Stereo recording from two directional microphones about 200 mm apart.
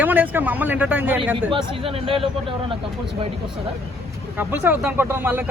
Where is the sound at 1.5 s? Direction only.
25° right (ahead or behind).